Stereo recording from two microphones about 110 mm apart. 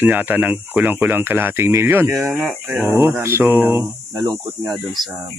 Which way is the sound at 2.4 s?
Centre (ahead or behind).